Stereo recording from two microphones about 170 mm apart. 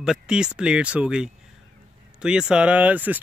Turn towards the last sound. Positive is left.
turn(degrees=-10)  # may be behind; listen again after turning